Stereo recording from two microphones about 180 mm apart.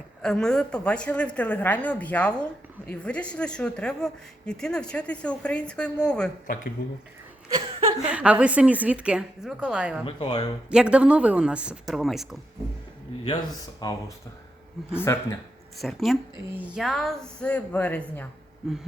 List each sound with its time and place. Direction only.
0.2 s a woman's voice: 5° left (ahead or behind)
7.5 s chuckle: 35° right (ahead or behind)
8.1 s a woman's voice: 5° right (ahead or behind)
10.1 s speech: 35° left (ahead or behind)
10.7 s speech: 5° right (ahead or behind)
13.2 s speech: 20° left (ahead or behind)
15.0 s a woman's voice: 15° left (ahead or behind)
15.8 s a woman's voice: centre (ahead or behind)